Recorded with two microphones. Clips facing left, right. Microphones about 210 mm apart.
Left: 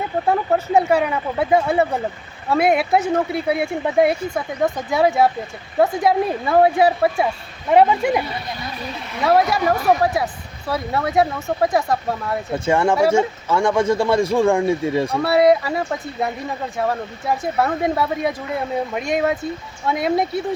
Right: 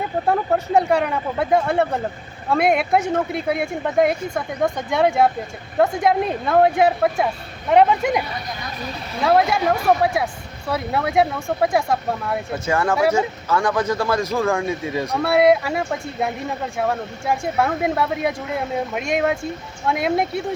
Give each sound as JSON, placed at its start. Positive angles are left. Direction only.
{"t": 0.3, "sound": "speech", "side_deg": 0}
{"t": 9.2, "sound": "speech", "side_deg": 0}
{"t": 12.6, "sound": "a man's voice", "side_deg": 25}
{"t": 13.0, "sound": "speech", "side_deg": 0}
{"t": 13.7, "sound": "a man's voice", "side_deg": 25}
{"t": 15.1, "sound": "speech", "side_deg": 0}